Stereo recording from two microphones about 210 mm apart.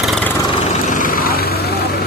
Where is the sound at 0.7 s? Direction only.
35° left (ahead or behind).